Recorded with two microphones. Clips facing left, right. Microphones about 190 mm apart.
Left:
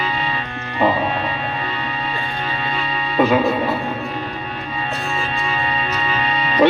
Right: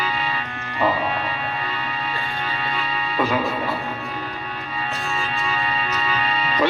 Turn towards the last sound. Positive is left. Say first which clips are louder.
# left 6 dB
turn(degrees=20)  # may be behind; listen again after turning